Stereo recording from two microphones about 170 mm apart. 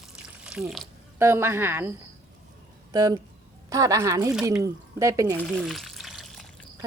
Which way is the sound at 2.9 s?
20° right (ahead or behind).